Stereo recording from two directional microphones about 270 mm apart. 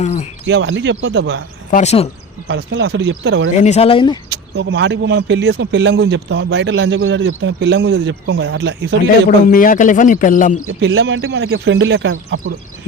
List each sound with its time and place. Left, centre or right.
0.0 s speech: left
0.4 s speech: right
1.7 s speech: left
2.5 s speech: right
3.5 s speech: left
4.3 s speech: right
9.5 s speech: left
10.7 s speech: right